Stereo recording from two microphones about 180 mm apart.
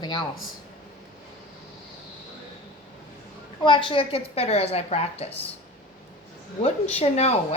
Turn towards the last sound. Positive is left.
turn(degrees=35)  # may be behind; listen again after turning